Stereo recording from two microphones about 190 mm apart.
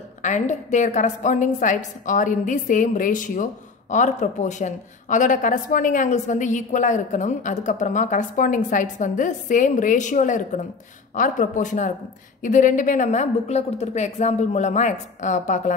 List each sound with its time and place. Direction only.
0.2 s a woman's voice: 40° left (ahead or behind)